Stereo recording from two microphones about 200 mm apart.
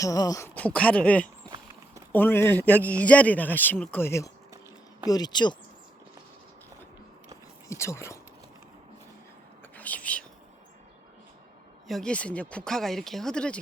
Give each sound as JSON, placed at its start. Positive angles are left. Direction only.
{"t": 0.0, "sound": "a man's voice", "side_deg": 15}
{"t": 7.7, "sound": "a man's voice", "side_deg": 15}
{"t": 9.7, "sound": "whispering", "side_deg": 10}
{"t": 11.9, "sound": "speech", "side_deg": 5}